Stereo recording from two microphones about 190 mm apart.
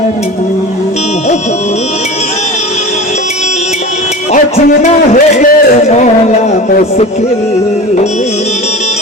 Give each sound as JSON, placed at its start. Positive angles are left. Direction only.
{"t": 4.3, "sound": "music", "side_deg": 35}
{"t": 5.1, "sound": "a man's voice", "side_deg": 50}
{"t": 6.5, "sound": "a sound", "side_deg": 40}